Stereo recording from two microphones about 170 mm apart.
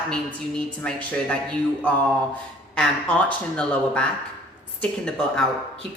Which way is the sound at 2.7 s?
5° left (ahead or behind).